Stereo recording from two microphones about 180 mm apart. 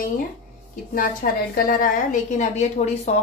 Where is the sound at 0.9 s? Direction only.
50° left (ahead or behind).